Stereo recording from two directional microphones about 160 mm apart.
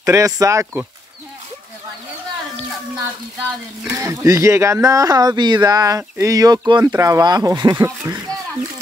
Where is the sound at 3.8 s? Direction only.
20° right (ahead or behind).